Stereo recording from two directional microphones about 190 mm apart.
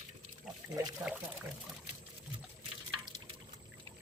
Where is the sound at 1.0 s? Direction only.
15° right (ahead or behind).